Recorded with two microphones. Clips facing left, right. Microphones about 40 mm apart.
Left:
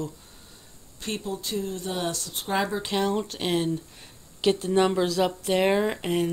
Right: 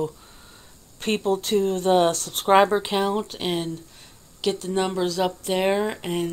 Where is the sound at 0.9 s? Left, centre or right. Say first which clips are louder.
Right 9 dB; right.